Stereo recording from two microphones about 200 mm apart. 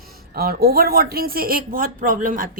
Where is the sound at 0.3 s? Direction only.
50° right (ahead or behind).